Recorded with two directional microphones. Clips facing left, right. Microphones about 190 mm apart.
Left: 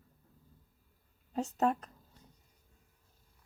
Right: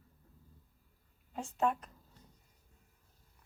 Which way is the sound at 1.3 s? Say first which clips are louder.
Left 3 dB; 40° left (ahead or behind).